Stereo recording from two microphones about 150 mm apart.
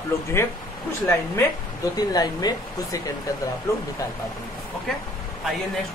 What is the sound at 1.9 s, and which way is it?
Speech, 25° left (ahead or behind).